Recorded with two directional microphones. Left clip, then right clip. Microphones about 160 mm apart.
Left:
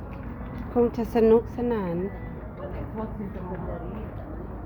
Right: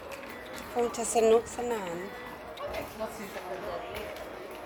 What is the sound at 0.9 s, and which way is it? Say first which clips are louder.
Speech: left 2 dB; 10° left (ahead or behind).